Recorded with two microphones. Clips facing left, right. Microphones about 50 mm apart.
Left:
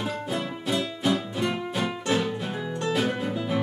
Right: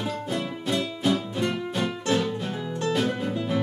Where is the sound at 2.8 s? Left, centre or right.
Centre.